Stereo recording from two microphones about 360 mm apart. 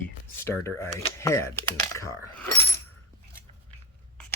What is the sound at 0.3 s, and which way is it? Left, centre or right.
Speech, centre.